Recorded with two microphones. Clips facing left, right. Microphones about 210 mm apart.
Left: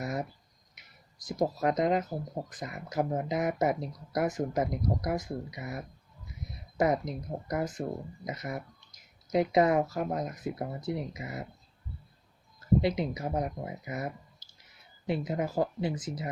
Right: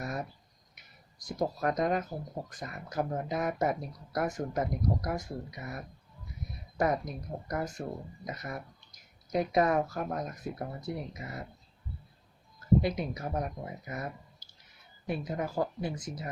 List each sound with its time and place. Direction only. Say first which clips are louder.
0.0 s a sound: left 3 dB; 20° left (ahead or behind)
1.3 s speech: left 3 dB; 20° left (ahead or behind)
12.8 s speech: left 3 dB; 20° left (ahead or behind)